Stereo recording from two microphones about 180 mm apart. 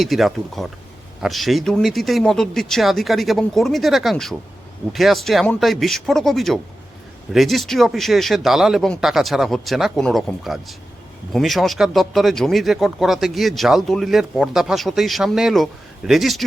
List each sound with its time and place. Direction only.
0.0 s speech: centre (ahead or behind)